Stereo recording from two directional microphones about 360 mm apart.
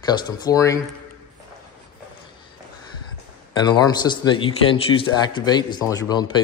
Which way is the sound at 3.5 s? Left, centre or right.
Centre.